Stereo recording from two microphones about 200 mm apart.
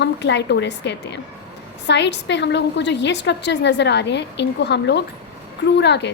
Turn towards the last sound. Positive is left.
turn(degrees=60)  # may be behind; listen again after turning